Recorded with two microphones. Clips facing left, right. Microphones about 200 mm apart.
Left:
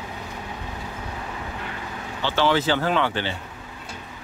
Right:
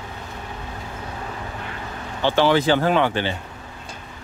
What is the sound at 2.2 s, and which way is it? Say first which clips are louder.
Speech: right 4 dB; 50° right (ahead or behind).